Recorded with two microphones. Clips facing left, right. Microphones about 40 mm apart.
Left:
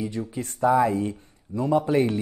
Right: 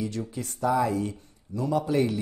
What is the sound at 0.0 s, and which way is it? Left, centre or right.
Speech, centre.